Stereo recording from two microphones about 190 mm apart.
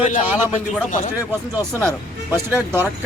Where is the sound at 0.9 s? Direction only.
40° left (ahead or behind).